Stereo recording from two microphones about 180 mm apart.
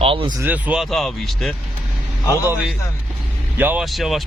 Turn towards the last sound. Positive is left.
turn(degrees=0)  # may be behind; listen again after turning